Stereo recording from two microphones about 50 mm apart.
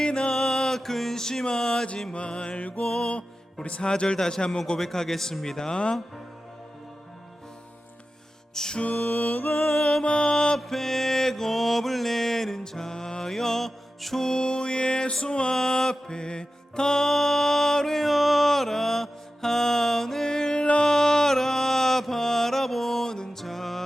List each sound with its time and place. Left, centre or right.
0.0 s music: centre
2.8 s speech: centre
8.5 s speech: centre
9.0 s music: left
9.7 s speech: centre
10.6 s mantra: centre
20.7 s music: centre